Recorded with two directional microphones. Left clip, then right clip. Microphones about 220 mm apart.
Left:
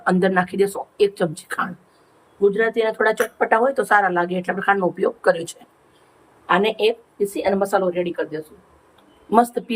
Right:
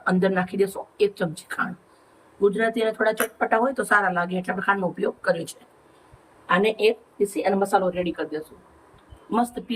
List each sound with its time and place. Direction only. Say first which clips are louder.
0.0 s speech: left 4 dB; 15° left (ahead or behind)
2.4 s speech: left 3 dB; 5° left (ahead or behind)